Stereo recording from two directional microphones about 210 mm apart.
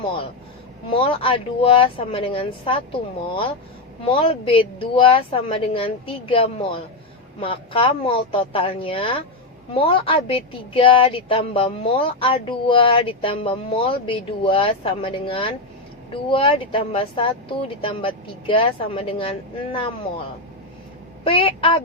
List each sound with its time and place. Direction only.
0.9 s a woman's voice: 25° left (ahead or behind)
4.0 s a woman's voice: 25° left (ahead or behind)
21.2 s a woman's voice: 25° left (ahead or behind)